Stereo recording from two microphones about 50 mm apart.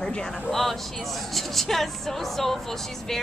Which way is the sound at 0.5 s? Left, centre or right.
Centre.